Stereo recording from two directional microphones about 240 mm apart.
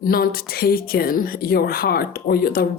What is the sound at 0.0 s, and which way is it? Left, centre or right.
A woman's voice, left.